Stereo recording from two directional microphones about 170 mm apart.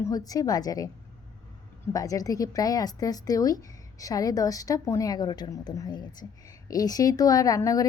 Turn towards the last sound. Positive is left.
turn(degrees=20)  # may be behind; listen again after turning